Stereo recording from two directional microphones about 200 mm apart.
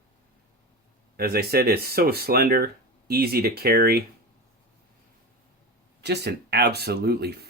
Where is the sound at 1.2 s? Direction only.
50° right (ahead or behind).